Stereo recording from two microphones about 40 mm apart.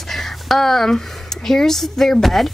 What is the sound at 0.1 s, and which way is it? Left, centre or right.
Speech, centre.